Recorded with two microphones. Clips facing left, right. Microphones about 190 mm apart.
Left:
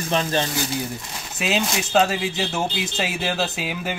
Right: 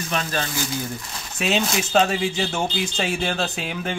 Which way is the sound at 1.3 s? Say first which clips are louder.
Right 1 dB; centre (ahead or behind).